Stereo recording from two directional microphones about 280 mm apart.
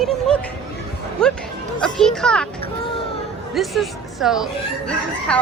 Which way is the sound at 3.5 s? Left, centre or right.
Centre.